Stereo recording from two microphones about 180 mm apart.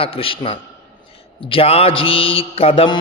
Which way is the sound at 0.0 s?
30° left (ahead or behind).